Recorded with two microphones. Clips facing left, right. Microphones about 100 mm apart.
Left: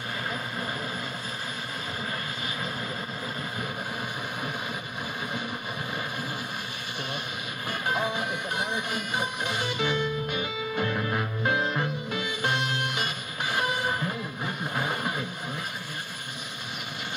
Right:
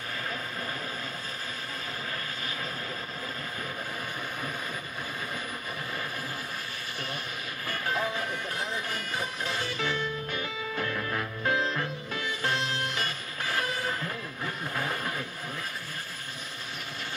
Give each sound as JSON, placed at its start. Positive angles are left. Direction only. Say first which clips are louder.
{"t": 7.6, "sound": "music", "louder": "left 2 dB", "side_deg": 20}